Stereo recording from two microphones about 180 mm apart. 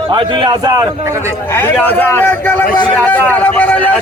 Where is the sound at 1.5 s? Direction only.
10° left (ahead or behind).